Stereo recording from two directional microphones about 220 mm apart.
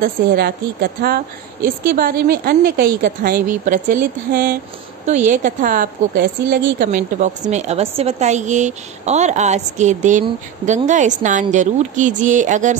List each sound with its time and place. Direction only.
0.0 s a woman's voice: 45° right (ahead or behind)